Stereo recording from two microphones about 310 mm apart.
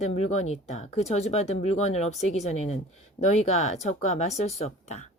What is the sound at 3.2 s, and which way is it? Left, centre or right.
Speech, left.